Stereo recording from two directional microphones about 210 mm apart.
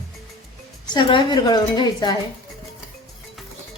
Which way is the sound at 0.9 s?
25° left (ahead or behind).